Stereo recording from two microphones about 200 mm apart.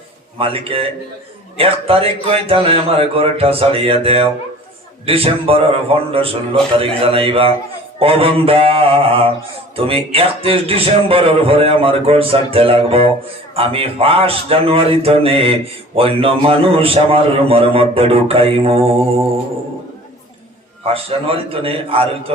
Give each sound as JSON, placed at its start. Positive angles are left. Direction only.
{"t": 0.3, "sound": "speech", "side_deg": -30}
{"t": 20.8, "sound": "speech", "side_deg": -30}